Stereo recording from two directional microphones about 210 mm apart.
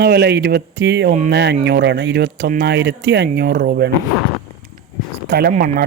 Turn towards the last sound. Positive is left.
turn(degrees=-45)  # may be behind; listen again after turning